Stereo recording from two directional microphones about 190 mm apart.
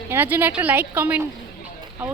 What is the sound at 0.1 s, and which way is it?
A woman's voice, 10° right (ahead or behind).